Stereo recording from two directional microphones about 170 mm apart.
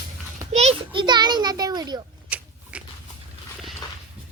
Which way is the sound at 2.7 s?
5° right (ahead or behind).